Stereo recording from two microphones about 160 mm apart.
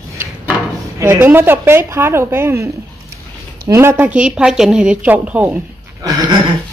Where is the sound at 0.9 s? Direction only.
15° right (ahead or behind).